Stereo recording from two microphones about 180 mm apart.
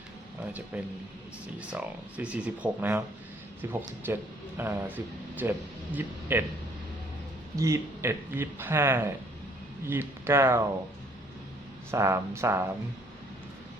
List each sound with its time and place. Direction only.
0.7 s speech: 5° right (ahead or behind)
7.5 s speech: 15° right (ahead or behind)
11.9 s speech: 15° right (ahead or behind)